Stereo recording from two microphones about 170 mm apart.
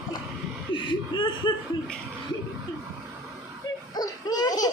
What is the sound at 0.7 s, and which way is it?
Laughter, 30° left (ahead or behind).